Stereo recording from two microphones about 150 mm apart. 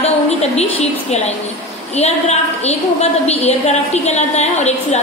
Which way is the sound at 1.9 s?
45° left (ahead or behind).